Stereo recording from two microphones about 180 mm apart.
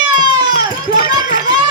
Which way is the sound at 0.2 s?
25° right (ahead or behind).